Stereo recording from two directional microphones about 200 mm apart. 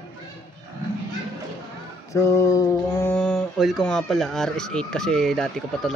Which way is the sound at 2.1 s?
15° left (ahead or behind).